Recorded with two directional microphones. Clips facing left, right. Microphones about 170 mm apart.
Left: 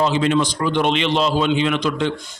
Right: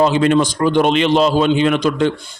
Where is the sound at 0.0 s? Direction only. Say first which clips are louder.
Right 4 dB; 50° right (ahead or behind).